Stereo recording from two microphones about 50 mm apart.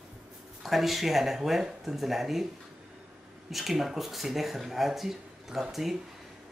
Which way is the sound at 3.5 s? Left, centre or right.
Centre.